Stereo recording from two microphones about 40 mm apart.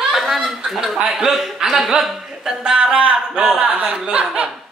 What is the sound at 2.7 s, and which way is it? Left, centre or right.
Speech, right.